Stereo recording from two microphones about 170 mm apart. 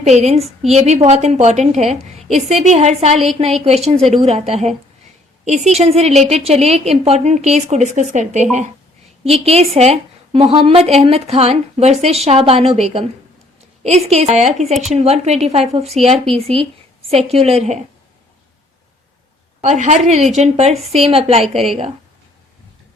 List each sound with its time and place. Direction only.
0.0 s a woman's voice: 40° right (ahead or behind)
19.6 s a woman's voice: 45° right (ahead or behind)